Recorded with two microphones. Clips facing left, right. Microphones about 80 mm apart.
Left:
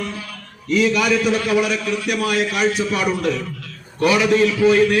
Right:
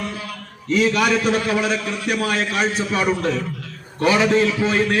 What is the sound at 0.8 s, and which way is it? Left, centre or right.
Speech, right.